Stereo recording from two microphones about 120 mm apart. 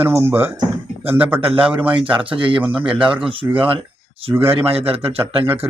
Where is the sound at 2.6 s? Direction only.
10° right (ahead or behind).